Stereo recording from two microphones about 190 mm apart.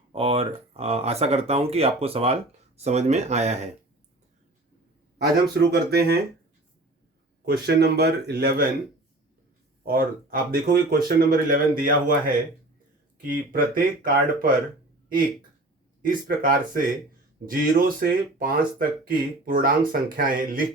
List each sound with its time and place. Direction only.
0.1 s speech: 30° right (ahead or behind)
5.1 s speech: 60° right (ahead or behind)
7.4 s speech: 60° right (ahead or behind)
9.8 s speech: 50° right (ahead or behind)
13.5 s speech: 50° right (ahead or behind)
16.0 s speech: 45° right (ahead or behind)